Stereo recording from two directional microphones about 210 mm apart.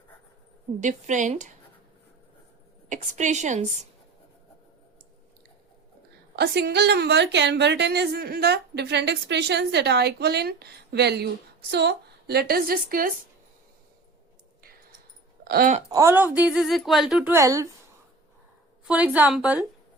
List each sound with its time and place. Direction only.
0.8 s a woman's voice: 35° right (ahead or behind)
2.9 s a woman's voice: 35° right (ahead or behind)
6.3 s a woman's voice: 50° right (ahead or behind)
15.4 s a woman's voice: 40° right (ahead or behind)
15.9 s speech: 15° right (ahead or behind)
18.9 s speech: 5° right (ahead or behind)